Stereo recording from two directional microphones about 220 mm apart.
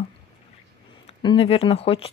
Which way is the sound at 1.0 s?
25° left (ahead or behind).